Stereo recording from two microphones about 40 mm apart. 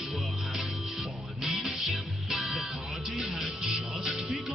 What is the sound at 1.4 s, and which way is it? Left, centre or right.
Music, centre.